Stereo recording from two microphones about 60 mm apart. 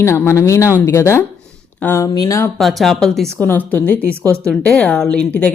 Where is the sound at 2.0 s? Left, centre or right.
Left.